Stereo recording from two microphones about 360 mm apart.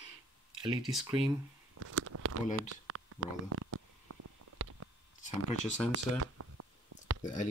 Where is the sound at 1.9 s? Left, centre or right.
Right.